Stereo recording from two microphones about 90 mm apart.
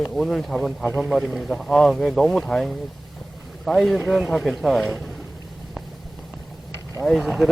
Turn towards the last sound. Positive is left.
turn(degrees=0)  # may be behind; listen again after turning